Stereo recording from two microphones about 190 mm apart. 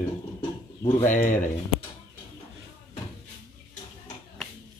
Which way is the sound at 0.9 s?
40° left (ahead or behind).